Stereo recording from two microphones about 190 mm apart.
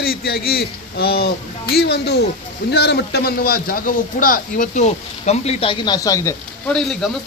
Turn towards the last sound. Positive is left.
turn(degrees=5)  # may be behind; listen again after turning